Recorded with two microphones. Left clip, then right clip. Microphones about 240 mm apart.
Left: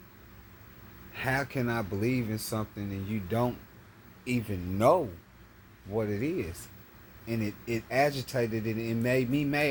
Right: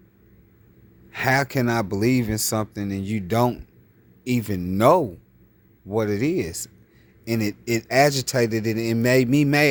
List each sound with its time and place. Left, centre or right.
1.1 s speech: right